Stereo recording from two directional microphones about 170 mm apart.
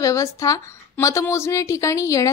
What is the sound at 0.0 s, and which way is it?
A woman's voice, 20° left (ahead or behind).